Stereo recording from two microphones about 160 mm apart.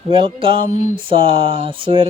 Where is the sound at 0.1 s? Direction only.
35° right (ahead or behind).